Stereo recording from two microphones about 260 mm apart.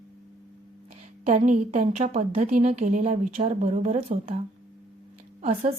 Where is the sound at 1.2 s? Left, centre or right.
Right.